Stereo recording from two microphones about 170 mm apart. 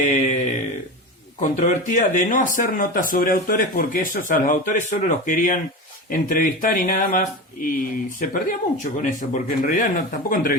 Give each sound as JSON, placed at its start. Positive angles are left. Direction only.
{"t": 0.0, "sound": "speech", "side_deg": 45}
{"t": 1.4, "sound": "speech", "side_deg": 45}